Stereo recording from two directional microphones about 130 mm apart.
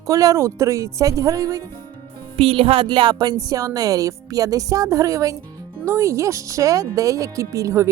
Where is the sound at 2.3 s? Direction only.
45° right (ahead or behind).